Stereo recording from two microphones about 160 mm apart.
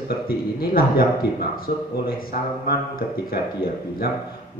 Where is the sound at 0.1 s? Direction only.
70° left (ahead or behind).